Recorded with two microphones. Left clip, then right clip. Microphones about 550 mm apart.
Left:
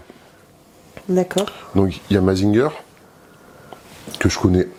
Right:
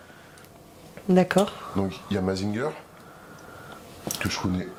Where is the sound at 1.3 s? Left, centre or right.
Left.